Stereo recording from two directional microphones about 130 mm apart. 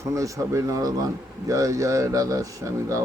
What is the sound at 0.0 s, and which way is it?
Speech, 25° right (ahead or behind).